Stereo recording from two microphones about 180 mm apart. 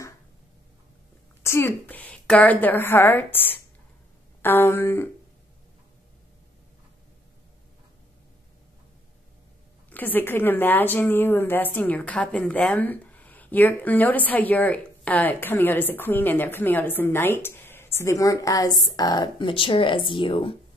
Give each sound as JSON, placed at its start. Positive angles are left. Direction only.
{"t": 1.4, "sound": "a woman's voice", "side_deg": 15}
{"t": 9.8, "sound": "a woman's voice", "side_deg": 10}